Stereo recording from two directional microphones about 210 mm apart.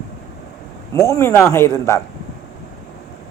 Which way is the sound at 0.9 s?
15° left (ahead or behind).